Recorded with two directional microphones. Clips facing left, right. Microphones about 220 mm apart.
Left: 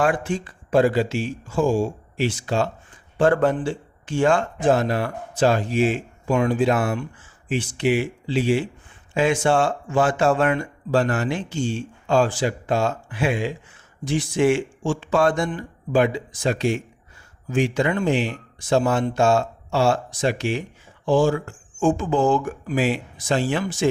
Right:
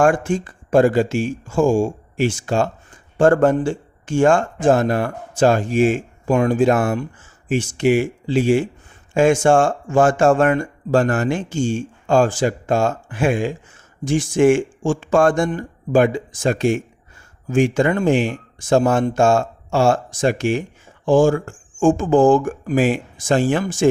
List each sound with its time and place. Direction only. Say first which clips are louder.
0.0 s speech: right 5 dB; 50° right (ahead or behind)